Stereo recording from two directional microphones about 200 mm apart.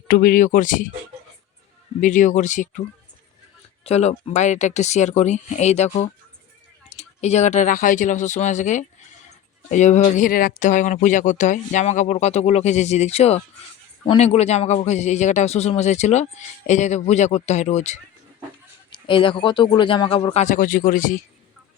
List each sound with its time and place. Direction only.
0.1 s a man's voice: 45° left (ahead or behind)
2.0 s a man's voice: 40° left (ahead or behind)
3.8 s a man's voice: 35° left (ahead or behind)